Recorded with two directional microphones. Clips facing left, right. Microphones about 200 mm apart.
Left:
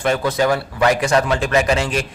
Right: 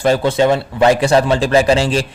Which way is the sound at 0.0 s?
30° right (ahead or behind).